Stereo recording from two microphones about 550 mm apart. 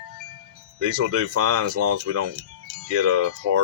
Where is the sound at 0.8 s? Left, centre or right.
Right.